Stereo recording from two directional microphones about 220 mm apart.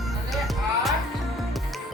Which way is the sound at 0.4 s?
Centre (ahead or behind).